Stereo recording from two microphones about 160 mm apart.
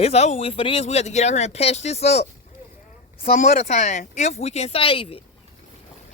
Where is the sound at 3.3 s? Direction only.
45° left (ahead or behind).